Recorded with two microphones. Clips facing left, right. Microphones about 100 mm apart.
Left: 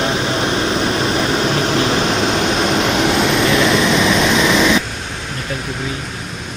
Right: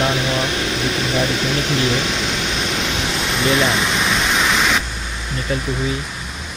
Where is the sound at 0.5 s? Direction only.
40° left (ahead or behind); by 3.5 s 85° left.